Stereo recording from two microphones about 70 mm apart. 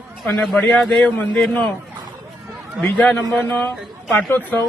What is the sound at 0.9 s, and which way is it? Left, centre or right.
Speech, centre.